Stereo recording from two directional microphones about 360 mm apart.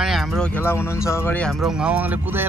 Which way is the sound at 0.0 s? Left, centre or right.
Centre.